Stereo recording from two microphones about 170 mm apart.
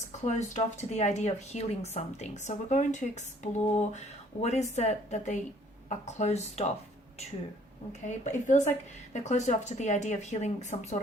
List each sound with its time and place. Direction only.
0.3 s speech: 45° left (ahead or behind)
8.0 s speech: 45° left (ahead or behind)